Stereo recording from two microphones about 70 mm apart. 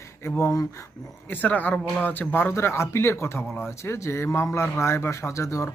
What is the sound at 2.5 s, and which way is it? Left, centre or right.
Speech, left.